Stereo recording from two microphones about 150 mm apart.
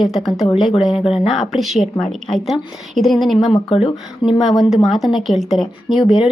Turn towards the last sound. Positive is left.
turn(degrees=0)  # may be behind; listen again after turning